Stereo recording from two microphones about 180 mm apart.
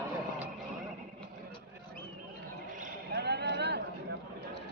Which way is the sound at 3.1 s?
65° right (ahead or behind).